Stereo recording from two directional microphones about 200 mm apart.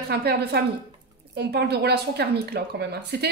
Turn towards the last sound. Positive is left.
turn(degrees=-55)  # may be behind; listen again after turning